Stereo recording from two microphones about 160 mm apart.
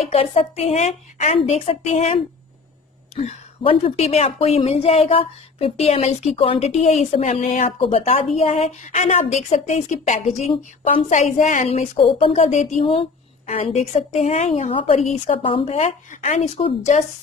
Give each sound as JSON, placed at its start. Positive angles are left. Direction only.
{"t": 0.0, "sound": "a woman's voice", "side_deg": 40}
{"t": 3.2, "sound": "a woman's voice", "side_deg": 40}
{"t": 10.5, "sound": "a woman's voice", "side_deg": 35}
{"t": 11.1, "sound": "a woman's voice", "side_deg": 50}
{"t": 12.8, "sound": "a woman's voice", "side_deg": 35}
{"t": 14.7, "sound": "a woman's voice", "side_deg": 35}